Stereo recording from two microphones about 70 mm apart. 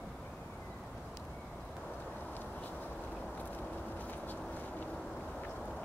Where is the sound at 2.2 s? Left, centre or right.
Left.